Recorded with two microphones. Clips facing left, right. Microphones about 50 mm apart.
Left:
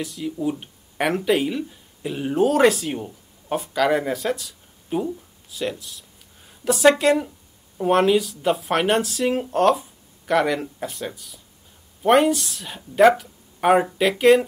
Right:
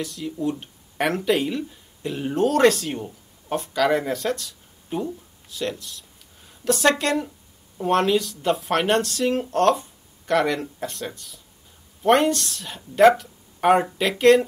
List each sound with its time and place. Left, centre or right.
0.0 s speech: centre